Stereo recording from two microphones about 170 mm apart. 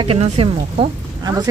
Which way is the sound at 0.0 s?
35° right (ahead or behind).